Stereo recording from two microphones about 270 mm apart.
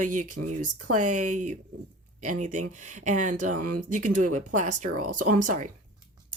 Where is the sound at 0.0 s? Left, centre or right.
Right.